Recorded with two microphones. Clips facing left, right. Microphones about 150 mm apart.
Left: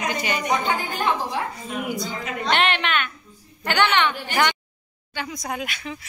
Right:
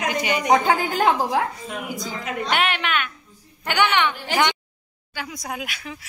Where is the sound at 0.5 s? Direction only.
90° right.